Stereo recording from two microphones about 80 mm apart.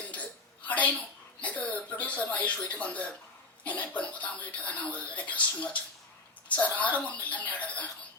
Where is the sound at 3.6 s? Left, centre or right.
Centre.